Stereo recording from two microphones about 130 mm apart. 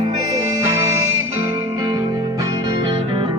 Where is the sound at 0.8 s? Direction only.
25° right (ahead or behind).